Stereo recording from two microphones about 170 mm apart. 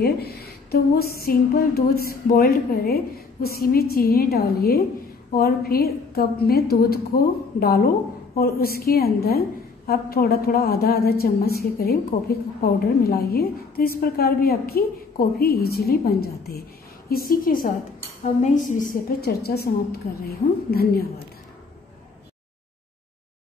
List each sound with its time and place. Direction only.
0.0 s a woman's voice: 65° left (ahead or behind)
18.2 s a woman's voice: 45° left (ahead or behind); by 21.1 s 65° left (ahead or behind)